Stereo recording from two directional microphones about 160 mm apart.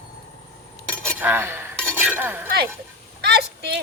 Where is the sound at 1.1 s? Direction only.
15° right (ahead or behind).